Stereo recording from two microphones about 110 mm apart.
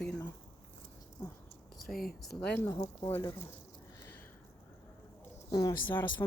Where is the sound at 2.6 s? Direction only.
30° left (ahead or behind).